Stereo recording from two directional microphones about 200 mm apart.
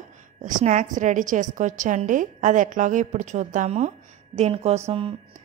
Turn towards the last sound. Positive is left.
turn(degrees=-30)  # may be behind; listen again after turning